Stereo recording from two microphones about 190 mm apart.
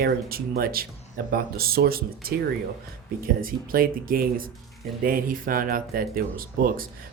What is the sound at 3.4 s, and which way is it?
Speech, 50° right (ahead or behind).